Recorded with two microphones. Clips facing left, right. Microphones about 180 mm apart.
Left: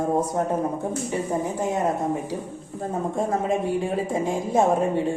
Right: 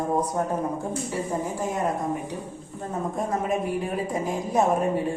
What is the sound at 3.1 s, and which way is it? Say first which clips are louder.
Speech: left 2 dB; 25° left (ahead or behind).